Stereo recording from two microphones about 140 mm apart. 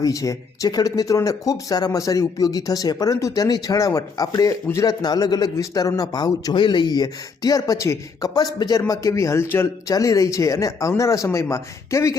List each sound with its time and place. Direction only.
0.0 s speech: 25° left (ahead or behind)